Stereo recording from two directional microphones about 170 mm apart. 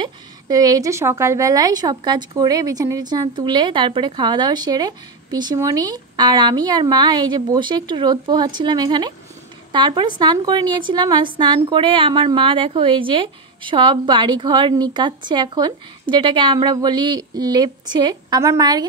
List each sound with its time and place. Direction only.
0.0 s a woman's voice: 20° right (ahead or behind)